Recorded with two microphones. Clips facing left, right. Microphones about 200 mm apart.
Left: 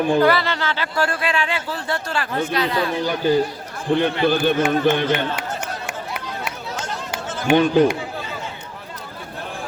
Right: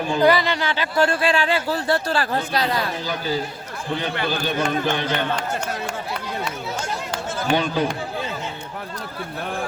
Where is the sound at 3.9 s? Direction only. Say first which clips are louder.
Left 7 dB; 55° left (ahead or behind).